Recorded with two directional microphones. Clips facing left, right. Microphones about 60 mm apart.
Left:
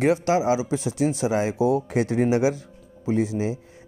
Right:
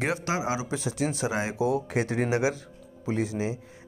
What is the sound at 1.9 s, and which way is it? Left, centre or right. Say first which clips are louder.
Speech: left 5 dB; right.